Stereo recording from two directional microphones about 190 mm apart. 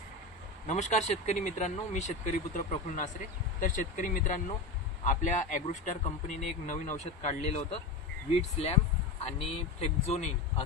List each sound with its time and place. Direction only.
0.7 s speech: 40° left (ahead or behind)